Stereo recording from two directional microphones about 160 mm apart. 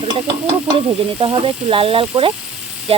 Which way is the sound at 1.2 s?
30° right (ahead or behind).